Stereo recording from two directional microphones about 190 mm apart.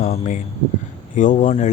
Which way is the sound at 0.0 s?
40° left (ahead or behind).